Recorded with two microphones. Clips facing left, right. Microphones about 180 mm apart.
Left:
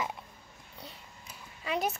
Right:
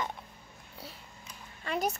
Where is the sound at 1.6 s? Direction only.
Centre (ahead or behind).